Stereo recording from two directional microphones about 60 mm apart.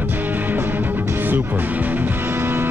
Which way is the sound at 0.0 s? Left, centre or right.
Right.